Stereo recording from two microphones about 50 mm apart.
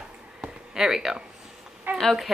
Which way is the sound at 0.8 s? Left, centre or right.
Centre.